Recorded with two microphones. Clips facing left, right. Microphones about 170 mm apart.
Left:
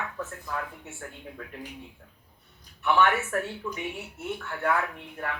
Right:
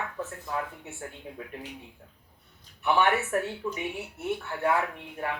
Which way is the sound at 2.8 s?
15° right (ahead or behind).